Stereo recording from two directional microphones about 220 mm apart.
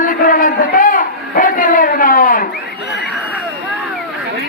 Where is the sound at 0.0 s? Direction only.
35° left (ahead or behind).